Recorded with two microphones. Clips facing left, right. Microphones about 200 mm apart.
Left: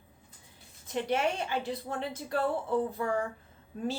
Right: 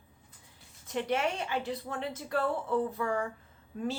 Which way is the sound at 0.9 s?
30° left (ahead or behind).